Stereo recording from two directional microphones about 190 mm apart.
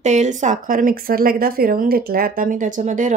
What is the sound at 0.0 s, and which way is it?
Speech, 40° right (ahead or behind).